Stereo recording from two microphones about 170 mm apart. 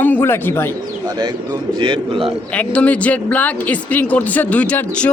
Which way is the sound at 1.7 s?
30° right (ahead or behind).